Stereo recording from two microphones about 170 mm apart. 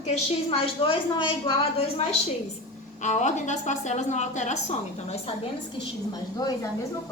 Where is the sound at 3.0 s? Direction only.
45° left (ahead or behind).